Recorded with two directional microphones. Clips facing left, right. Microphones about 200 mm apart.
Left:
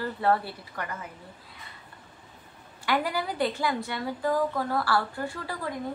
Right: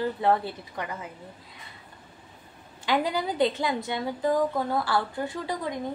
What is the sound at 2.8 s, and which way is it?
A woman's voice, 20° right (ahead or behind).